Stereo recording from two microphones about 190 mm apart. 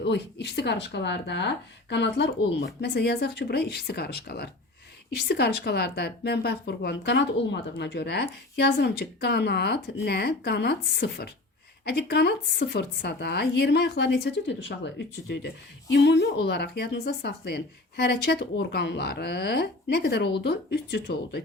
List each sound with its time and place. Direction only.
0.0 s a woman's voice: 65° left (ahead or behind)